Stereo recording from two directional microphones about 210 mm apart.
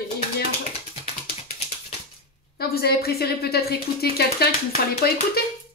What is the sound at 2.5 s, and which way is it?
Speech, 45° left (ahead or behind).